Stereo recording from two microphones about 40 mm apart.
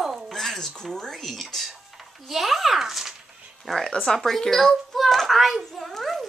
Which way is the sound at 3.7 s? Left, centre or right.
Centre.